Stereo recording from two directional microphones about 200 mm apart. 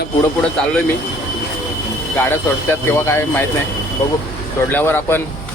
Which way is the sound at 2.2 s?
10° left (ahead or behind).